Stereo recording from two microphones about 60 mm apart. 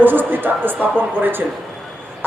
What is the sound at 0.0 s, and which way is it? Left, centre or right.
A man's voice, right.